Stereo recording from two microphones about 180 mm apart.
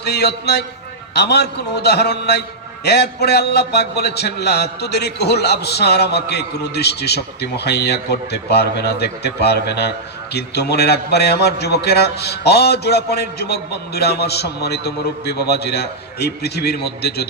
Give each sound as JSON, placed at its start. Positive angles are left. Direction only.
{"t": 0.0, "sound": "a man's voice", "side_deg": 65}